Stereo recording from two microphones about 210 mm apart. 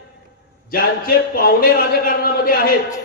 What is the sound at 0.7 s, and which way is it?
A man's voice, 45° left (ahead or behind).